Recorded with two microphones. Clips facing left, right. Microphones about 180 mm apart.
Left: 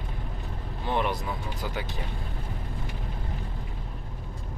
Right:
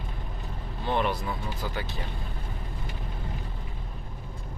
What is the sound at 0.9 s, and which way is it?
Speech, 15° left (ahead or behind).